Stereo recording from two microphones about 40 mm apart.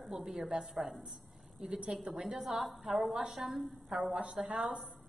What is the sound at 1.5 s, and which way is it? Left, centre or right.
Speech, right.